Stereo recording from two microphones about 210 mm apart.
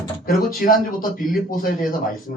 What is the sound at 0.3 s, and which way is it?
Speech, 45° left (ahead or behind).